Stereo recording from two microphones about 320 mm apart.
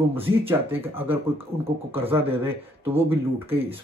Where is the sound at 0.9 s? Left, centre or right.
Centre.